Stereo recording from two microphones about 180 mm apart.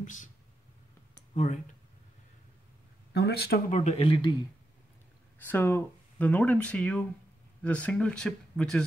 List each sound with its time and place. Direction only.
0.0 s speech: 45° left (ahead or behind)
1.3 s speech: 40° left (ahead or behind)
3.1 s speech: 65° left (ahead or behind)
3.8 s speech: 30° left (ahead or behind)
5.5 s speech: 10° left (ahead or behind)